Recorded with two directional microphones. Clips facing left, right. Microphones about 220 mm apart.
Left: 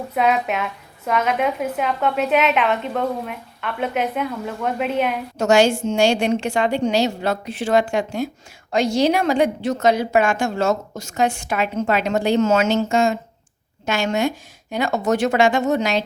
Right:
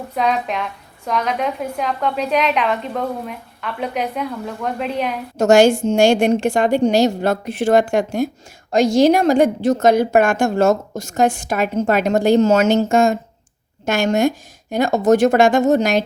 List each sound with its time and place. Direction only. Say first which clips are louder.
0.1 s a woman's voice: even; 5° left (ahead or behind)
5.4 s a woman's voice: right 4 dB; 50° right (ahead or behind)